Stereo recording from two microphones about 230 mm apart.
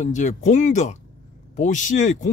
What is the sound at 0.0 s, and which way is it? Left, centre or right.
Speech, left.